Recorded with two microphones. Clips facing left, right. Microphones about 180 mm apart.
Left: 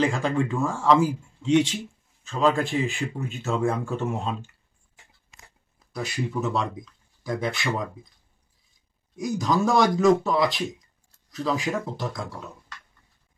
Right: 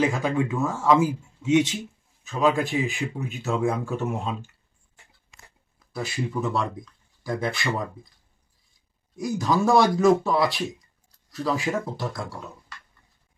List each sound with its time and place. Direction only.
0.0 s a man's voice: 5° right (ahead or behind)
2.2 s a man's voice: 15° right (ahead or behind)
3.3 s speech: centre (ahead or behind)
5.9 s speech: centre (ahead or behind)
9.1 s speech: centre (ahead or behind)